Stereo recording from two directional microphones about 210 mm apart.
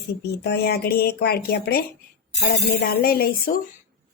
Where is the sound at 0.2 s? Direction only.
50° left (ahead or behind).